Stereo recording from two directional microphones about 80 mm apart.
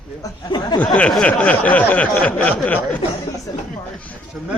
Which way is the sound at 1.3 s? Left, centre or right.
Centre.